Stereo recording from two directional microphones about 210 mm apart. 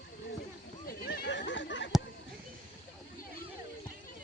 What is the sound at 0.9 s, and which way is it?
Neigh, 45° left (ahead or behind).